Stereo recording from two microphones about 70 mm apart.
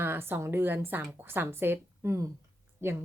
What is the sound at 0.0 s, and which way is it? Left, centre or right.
Speech, right.